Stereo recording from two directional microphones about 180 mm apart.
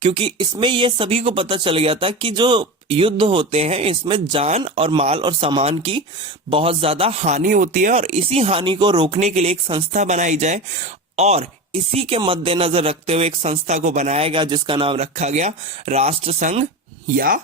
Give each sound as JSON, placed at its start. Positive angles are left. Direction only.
{"t": 0.0, "sound": "speech", "side_deg": -30}
{"t": 9.9, "sound": "speech", "side_deg": -40}
{"t": 17.2, "sound": "speech", "side_deg": -50}